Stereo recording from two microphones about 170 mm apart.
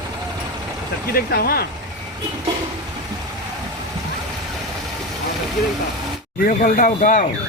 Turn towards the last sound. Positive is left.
turn(degrees=50)  # may be behind; listen again after turning